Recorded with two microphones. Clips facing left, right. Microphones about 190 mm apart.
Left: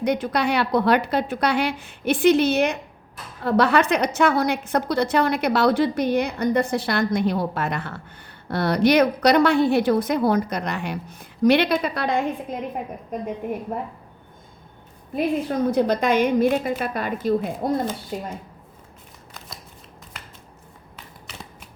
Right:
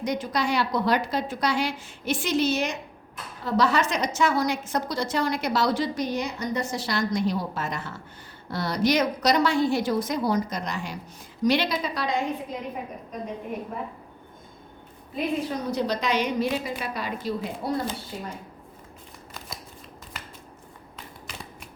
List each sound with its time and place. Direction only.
0.0 s a woman's voice: 60° left (ahead or behind)
15.1 s a woman's voice: 50° left (ahead or behind)
20.1 s a sound: centre (ahead or behind)